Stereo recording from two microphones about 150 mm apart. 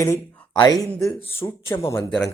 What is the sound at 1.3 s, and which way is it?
Speech, 15° left (ahead or behind).